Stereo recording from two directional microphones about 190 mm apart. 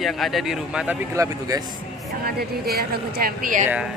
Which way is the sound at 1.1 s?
15° right (ahead or behind).